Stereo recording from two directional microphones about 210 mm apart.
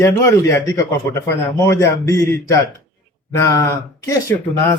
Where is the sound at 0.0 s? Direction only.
15° left (ahead or behind).